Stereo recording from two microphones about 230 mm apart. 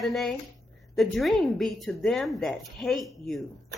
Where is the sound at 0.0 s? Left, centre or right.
Centre.